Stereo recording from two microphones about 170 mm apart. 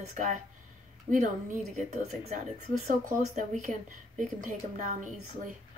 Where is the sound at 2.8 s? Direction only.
45° right (ahead or behind).